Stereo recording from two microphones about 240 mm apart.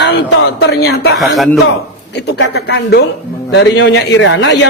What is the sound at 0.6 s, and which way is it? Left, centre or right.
Speech, left.